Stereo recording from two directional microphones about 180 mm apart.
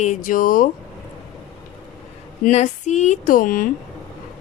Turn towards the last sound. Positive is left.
turn(degrees=50)  # may be behind; listen again after turning